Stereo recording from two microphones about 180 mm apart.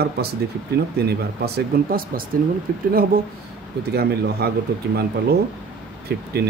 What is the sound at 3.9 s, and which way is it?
Speech, 60° right (ahead or behind).